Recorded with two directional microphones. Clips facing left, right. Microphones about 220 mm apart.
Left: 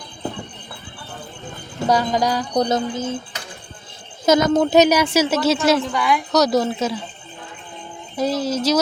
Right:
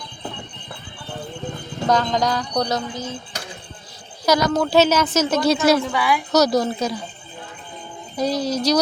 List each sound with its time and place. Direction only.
1.9 s a woman's voice: 10° left (ahead or behind)
2.6 s speech: 25° left (ahead or behind)
2.9 s speech: 50° left (ahead or behind)
4.3 s a woman's voice: 25° left (ahead or behind); by 7.0 s 5° left (ahead or behind)
8.1 s a woman's voice: 5° left (ahead or behind)